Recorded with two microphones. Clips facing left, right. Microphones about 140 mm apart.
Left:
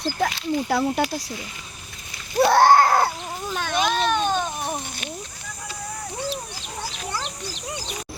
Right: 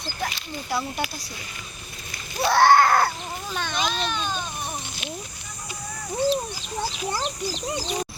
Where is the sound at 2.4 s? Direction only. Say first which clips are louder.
Left 2 dB; 45° left (ahead or behind).